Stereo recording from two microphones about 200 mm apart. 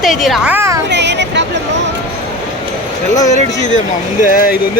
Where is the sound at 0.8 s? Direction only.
60° right (ahead or behind).